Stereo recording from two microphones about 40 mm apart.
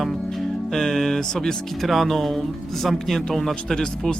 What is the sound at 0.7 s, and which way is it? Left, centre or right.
Music, centre.